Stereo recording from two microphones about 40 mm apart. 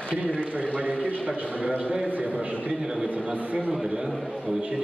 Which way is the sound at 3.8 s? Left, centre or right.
Centre.